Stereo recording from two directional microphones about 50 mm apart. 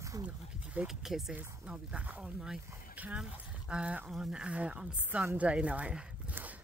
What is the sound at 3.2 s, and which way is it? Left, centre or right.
Speech, centre.